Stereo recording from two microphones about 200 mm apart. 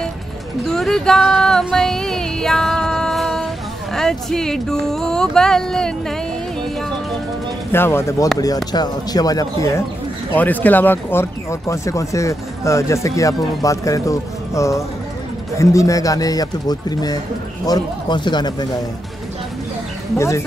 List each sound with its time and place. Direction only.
0.7 s a sound: centre (ahead or behind)
3.9 s speech: centre (ahead or behind)
7.7 s speech: 10° left (ahead or behind)
20.2 s speech: 15° left (ahead or behind)